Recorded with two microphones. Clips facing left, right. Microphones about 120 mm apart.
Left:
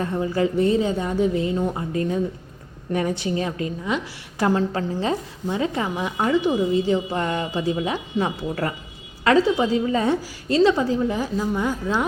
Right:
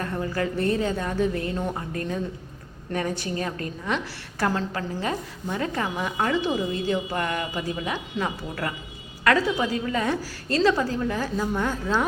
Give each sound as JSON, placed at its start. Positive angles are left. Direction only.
{"t": 0.0, "sound": "a woman's voice", "side_deg": 20}
{"t": 11.3, "sound": "a woman's voice", "side_deg": 5}